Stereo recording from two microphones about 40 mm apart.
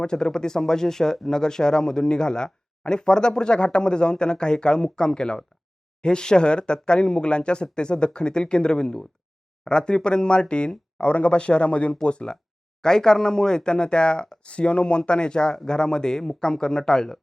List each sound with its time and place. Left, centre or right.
0.0 s speech: centre